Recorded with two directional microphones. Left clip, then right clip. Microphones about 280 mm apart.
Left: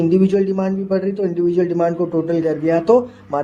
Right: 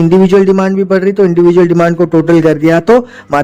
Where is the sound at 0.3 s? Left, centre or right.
Right.